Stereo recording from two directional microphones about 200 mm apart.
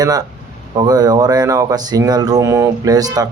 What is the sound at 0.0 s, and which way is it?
Speech, 20° right (ahead or behind).